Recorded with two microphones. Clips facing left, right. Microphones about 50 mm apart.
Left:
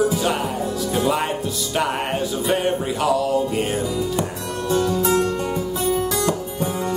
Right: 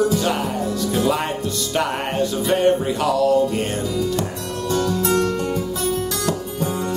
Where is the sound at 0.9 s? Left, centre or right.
Centre.